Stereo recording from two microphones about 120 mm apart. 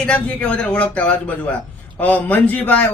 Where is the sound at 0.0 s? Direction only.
10° left (ahead or behind).